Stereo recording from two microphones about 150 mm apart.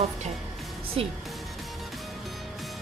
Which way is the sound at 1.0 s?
40° right (ahead or behind).